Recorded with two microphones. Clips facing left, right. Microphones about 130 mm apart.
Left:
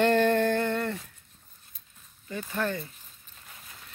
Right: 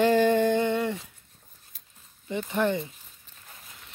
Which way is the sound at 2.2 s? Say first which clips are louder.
Right 5 dB; 20° right (ahead or behind).